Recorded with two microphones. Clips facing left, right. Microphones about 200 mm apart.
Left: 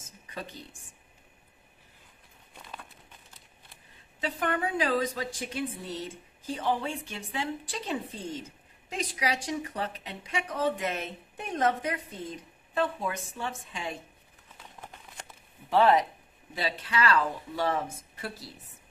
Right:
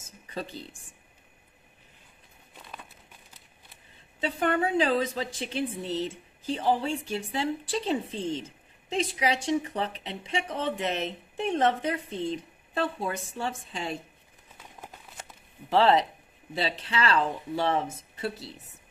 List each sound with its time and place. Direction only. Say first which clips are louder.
4.2 s a woman's voice: right 4 dB; 30° right (ahead or behind)
15.8 s a woman's voice: even; 25° right (ahead or behind)